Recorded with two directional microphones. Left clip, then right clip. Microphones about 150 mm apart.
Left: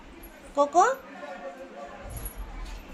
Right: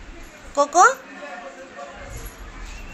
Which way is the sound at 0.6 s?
Centre (ahead or behind).